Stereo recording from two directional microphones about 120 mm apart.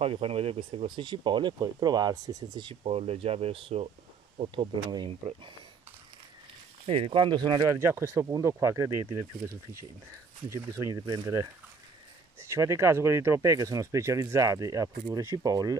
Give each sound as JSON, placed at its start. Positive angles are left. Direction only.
{"t": 0.0, "sound": "speech", "side_deg": -55}
{"t": 2.8, "sound": "speech", "side_deg": -55}
{"t": 4.4, "sound": "speech", "side_deg": -45}
{"t": 6.9, "sound": "speech", "side_deg": -50}
{"t": 7.7, "sound": "speech", "side_deg": -20}
{"t": 10.5, "sound": "speech", "side_deg": -30}
{"t": 12.4, "sound": "speech", "side_deg": -25}